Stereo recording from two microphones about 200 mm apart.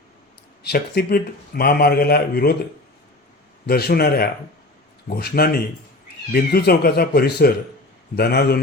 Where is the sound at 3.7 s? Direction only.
50° left (ahead or behind).